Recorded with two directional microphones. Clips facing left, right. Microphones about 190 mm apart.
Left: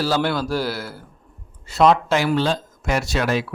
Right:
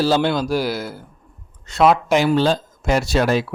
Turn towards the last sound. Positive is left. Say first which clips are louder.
# right 4 dB
turn(degrees=-35)  # may be behind; listen again after turning